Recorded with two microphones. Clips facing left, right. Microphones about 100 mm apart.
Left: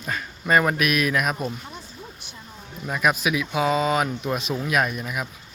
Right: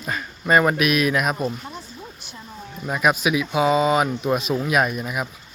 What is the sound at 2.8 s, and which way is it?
Speech, 10° right (ahead or behind).